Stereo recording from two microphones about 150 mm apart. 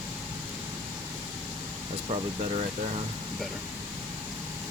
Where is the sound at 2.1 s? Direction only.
40° right (ahead or behind).